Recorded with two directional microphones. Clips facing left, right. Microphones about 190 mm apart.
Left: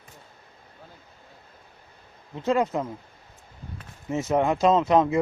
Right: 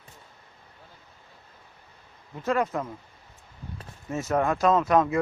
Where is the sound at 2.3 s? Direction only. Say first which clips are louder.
Left 3 dB; 20° left (ahead or behind).